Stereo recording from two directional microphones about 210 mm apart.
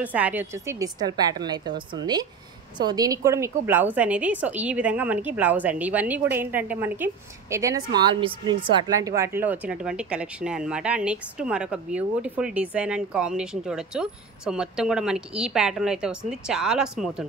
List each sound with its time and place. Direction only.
0.0 s a woman's voice: 5° right (ahead or behind)